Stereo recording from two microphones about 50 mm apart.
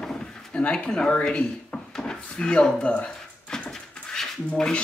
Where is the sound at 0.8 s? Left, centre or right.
Centre.